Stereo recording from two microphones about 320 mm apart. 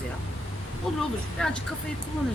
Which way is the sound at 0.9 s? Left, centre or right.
Centre.